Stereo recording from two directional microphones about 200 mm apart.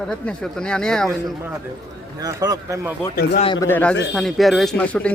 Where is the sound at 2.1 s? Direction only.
20° right (ahead or behind).